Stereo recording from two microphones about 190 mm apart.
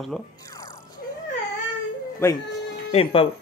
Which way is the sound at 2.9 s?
30° left (ahead or behind).